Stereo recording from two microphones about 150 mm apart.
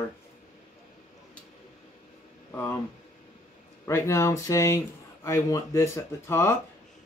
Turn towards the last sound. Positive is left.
turn(degrees=20)  # may be behind; listen again after turning